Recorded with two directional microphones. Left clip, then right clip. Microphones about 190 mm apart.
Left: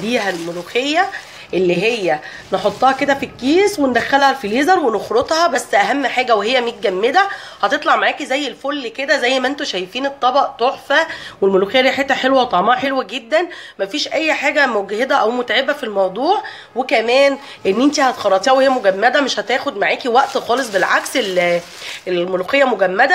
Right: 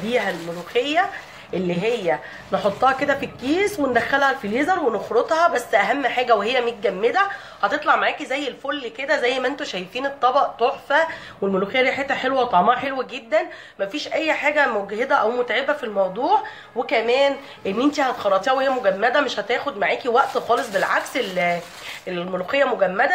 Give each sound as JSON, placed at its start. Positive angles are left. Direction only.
{"t": 0.7, "sound": "a woman's voice", "side_deg": 35}